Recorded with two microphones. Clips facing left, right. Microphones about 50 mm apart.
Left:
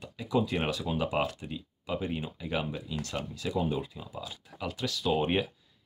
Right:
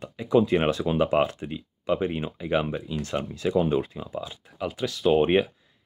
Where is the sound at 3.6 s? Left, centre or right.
Right.